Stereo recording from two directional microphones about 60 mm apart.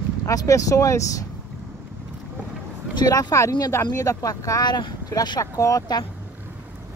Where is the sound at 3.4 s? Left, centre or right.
Left.